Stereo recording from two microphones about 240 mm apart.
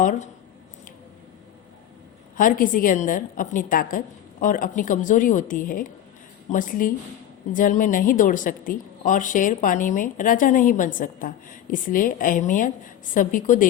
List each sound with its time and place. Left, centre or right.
0.0 s a woman's voice: left
2.4 s a woman's voice: left